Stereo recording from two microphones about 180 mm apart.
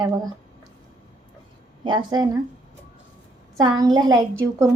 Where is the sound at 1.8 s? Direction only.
25° right (ahead or behind).